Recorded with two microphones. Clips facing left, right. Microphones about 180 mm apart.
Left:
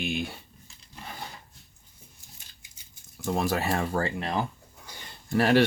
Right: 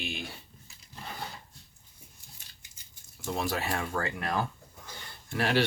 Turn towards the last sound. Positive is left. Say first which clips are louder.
# left 6 dB
turn(degrees=45)  # may be behind; listen again after turning